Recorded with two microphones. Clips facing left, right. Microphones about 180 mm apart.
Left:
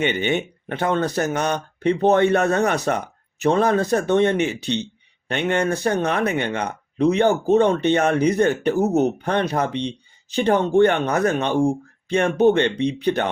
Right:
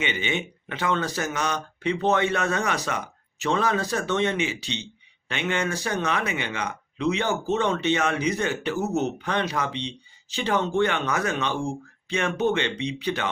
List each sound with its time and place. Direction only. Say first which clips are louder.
0.0 s speech: left 7 dB; 60° left (ahead or behind)